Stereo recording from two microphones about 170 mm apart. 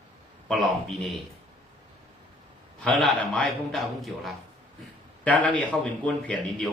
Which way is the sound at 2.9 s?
Centre (ahead or behind).